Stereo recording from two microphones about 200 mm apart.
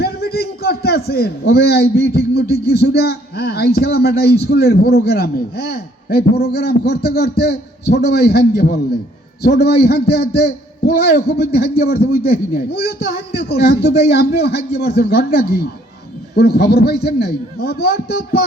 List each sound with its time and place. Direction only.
0.0 s a man's voice: 50° left (ahead or behind)